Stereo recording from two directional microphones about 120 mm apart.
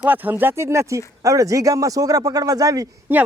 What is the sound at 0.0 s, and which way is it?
Speech, 15° right (ahead or behind).